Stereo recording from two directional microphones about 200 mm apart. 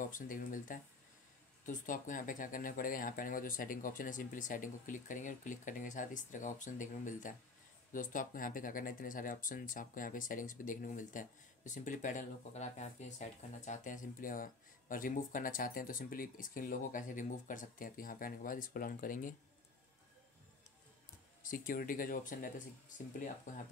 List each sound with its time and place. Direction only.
0.0 s speech: 45° left (ahead or behind)
21.4 s speech: 45° left (ahead or behind)